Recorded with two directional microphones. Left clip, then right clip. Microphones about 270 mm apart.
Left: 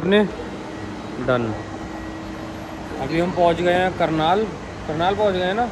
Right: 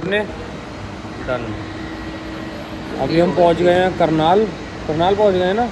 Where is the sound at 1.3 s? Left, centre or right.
Left.